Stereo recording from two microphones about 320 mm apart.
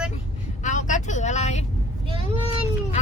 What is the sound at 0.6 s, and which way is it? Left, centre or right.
Vehicle, left.